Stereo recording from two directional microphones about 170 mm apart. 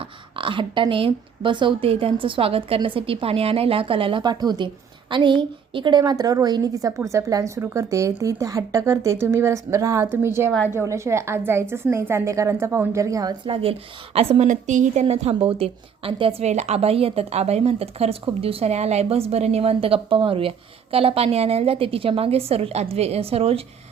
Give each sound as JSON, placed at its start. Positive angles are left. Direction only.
{"t": 0.3, "sound": "a woman's voice", "side_deg": -30}